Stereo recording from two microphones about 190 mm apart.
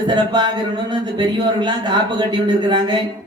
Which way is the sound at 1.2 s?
20° right (ahead or behind).